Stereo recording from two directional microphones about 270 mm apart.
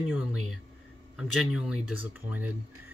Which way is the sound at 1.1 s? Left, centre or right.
Centre.